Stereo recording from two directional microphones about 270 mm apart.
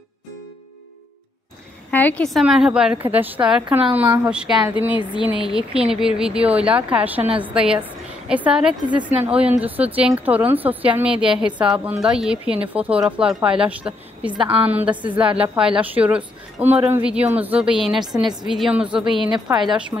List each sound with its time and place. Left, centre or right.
1.9 s a woman's voice: centre
3.6 s a woman's voice: centre
3.9 s a woman's voice: centre
4.9 s speech: centre
5.9 s a woman's voice: centre
14.3 s a woman's voice: centre
14.6 s a woman's voice: centre